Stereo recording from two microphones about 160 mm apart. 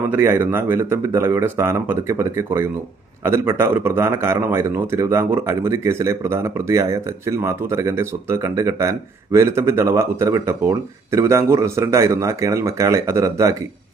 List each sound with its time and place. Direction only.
0.1 s speech: 15° right (ahead or behind)